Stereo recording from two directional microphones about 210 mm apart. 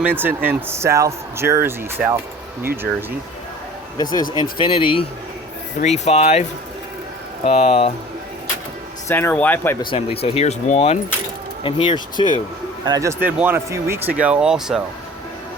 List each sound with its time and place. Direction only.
0.2 s speech: 10° right (ahead or behind)
3.9 s speech: 20° left (ahead or behind)
7.4 s speech: 30° left (ahead or behind)
9.0 s speech: 10° left (ahead or behind)
9.8 s speech: 25° left (ahead or behind)
12.8 s speech: 15° right (ahead or behind)